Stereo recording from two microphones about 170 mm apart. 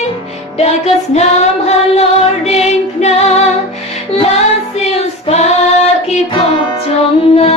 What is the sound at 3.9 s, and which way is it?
Music, 35° left (ahead or behind).